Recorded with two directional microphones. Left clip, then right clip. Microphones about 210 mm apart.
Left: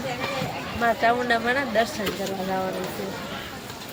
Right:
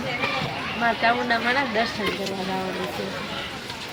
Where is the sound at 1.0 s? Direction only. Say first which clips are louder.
Even; 25° left (ahead or behind).